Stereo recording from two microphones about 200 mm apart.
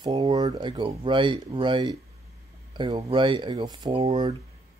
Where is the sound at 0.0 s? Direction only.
25° right (ahead or behind).